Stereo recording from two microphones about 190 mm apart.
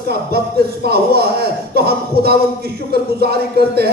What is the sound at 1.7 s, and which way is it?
A man's voice, 55° right (ahead or behind).